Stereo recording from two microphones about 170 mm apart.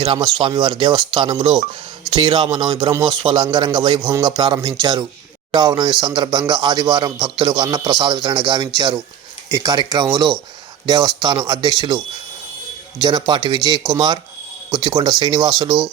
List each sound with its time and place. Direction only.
0.0 s speech: 25° right (ahead or behind)
13.1 s speech: 25° right (ahead or behind)